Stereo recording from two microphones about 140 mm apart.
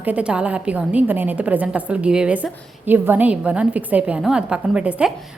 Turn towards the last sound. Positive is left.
turn(degrees=-5)  # may be behind; listen again after turning